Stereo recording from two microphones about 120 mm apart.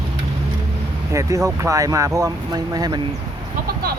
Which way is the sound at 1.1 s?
25° right (ahead or behind).